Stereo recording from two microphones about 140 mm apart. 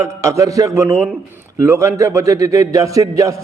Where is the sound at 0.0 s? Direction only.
20° right (ahead or behind).